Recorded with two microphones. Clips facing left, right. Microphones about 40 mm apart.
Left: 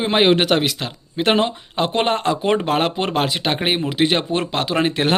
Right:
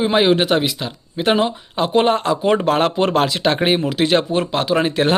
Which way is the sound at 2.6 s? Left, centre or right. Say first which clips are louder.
Right 3 dB; left.